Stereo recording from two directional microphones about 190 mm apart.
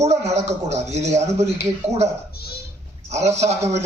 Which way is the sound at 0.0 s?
35° right (ahead or behind).